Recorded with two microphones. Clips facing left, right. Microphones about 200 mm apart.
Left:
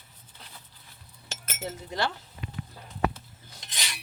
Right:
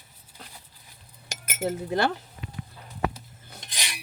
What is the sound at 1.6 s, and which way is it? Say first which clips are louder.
Speech: right 6 dB; 55° right (ahead or behind).